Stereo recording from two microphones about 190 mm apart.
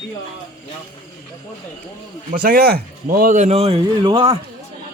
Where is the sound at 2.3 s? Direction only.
50° right (ahead or behind); by 4.3 s 30° right (ahead or behind).